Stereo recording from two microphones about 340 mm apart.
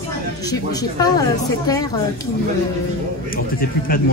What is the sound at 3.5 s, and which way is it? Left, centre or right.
Speech, left.